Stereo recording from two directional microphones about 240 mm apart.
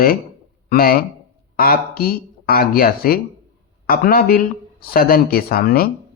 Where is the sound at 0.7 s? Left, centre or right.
Left.